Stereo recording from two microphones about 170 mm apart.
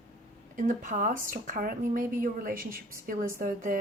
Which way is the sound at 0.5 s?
50° right (ahead or behind).